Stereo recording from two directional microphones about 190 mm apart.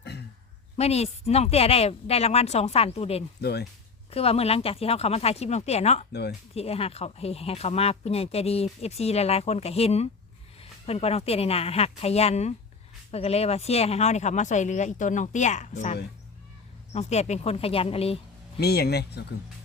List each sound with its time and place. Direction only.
0.0 s a sound: 65° left (ahead or behind)
0.8 s speech: 35° left (ahead or behind)
3.4 s speech: 60° left (ahead or behind)
4.1 s speech: 30° left (ahead or behind)
18.6 s speech: 55° left (ahead or behind)